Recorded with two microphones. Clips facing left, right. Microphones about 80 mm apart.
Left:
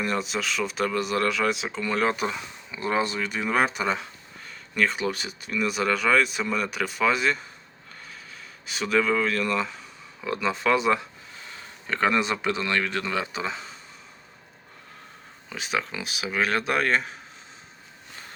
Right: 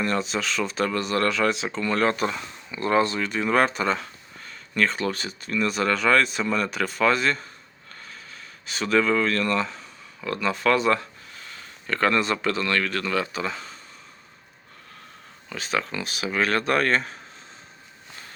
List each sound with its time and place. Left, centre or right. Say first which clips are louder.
0.0 s speech: right 2 dB; centre
15.4 s speech: right 2 dB; centre